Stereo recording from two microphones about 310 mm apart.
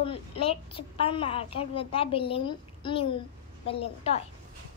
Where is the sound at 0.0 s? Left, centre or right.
Centre.